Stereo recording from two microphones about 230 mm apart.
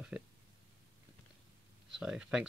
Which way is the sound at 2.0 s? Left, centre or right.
Centre.